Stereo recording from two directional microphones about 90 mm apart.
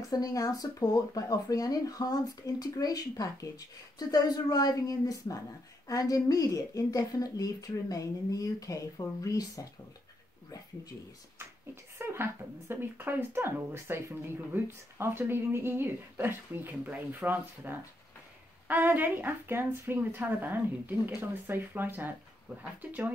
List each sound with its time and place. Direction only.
0.1 s a woman's voice: 40° left (ahead or behind)
11.3 s speech: 30° right (ahead or behind)